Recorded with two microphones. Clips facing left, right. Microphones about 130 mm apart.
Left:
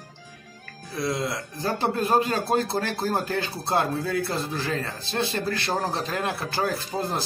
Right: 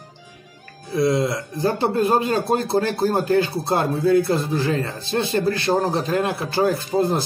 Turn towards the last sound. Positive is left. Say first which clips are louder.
# right 8 dB
turn(degrees=-20)  # may be behind; listen again after turning